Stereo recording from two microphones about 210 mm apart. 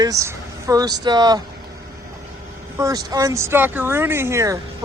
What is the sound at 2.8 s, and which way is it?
Speech, 15° right (ahead or behind).